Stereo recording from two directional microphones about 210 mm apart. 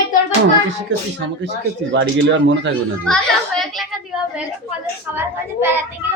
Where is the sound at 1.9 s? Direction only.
60° right (ahead or behind).